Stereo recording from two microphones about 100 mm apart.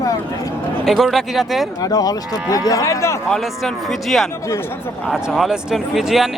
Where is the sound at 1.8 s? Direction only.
40° left (ahead or behind).